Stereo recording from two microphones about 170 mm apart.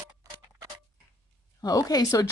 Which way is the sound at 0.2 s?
20° right (ahead or behind).